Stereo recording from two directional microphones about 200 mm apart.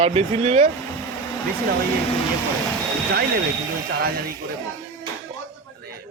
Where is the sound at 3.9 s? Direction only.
50° right (ahead or behind).